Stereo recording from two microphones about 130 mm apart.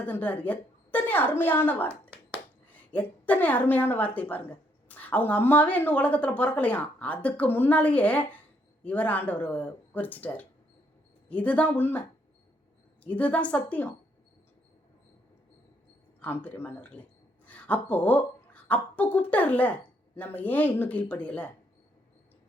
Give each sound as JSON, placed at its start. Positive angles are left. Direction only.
{"t": 0.0, "sound": "a woman's voice", "side_deg": 10}
{"t": 1.9, "sound": "a sound", "side_deg": -20}
{"t": 2.7, "sound": "a woman's voice", "side_deg": 10}
{"t": 13.1, "sound": "a woman's voice", "side_deg": 10}
{"t": 16.2, "sound": "speech", "side_deg": 10}